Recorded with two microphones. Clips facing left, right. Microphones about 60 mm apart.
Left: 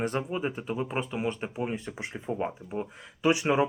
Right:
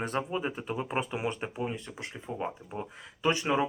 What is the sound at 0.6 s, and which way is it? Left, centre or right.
Speech, centre.